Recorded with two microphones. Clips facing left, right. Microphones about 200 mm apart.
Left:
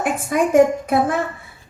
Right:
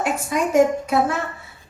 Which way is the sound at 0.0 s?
50° left (ahead or behind).